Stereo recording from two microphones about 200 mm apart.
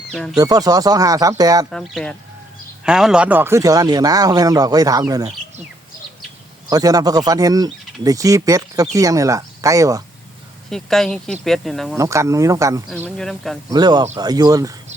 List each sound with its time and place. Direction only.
0.1 s speech: centre (ahead or behind)
0.3 s speech: 20° right (ahead or behind)
1.7 s speech: centre (ahead or behind); by 5.3 s 20° right (ahead or behind)
6.7 s speech: 20° right (ahead or behind)
10.7 s speech: centre (ahead or behind)
11.9 s speech: 15° right (ahead or behind)
13.1 s speech: centre (ahead or behind)
13.7 s speech: 20° right (ahead or behind)